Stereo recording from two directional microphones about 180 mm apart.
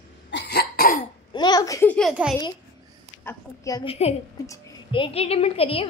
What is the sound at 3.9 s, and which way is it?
A woman's voice, 35° left (ahead or behind).